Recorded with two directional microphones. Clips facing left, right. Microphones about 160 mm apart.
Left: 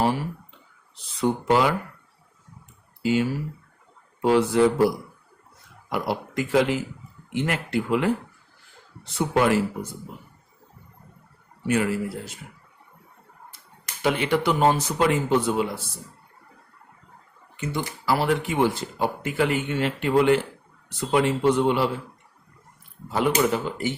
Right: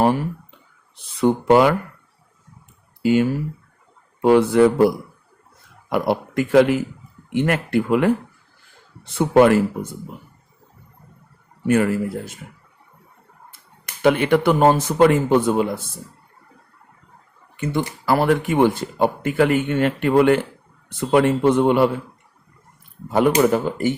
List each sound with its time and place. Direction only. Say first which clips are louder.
0.9 s speech: right 6 dB; 55° right (ahead or behind)
3.0 s speech: right 5 dB; 55° right (ahead or behind)
5.9 s speech: right 6 dB; 55° right (ahead or behind)
11.6 s speech: right 5 dB; 50° right (ahead or behind)
13.5 s speech: right 1 dB; 55° right (ahead or behind)
17.6 s speech: right 6 dB; 55° right (ahead or behind)
23.0 s speech: right 6 dB; 50° right (ahead or behind)